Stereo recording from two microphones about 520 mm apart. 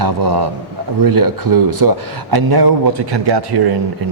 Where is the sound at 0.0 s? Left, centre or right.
Right.